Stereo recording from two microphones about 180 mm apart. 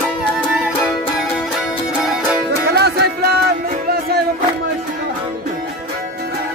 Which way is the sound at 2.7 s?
60° right (ahead or behind).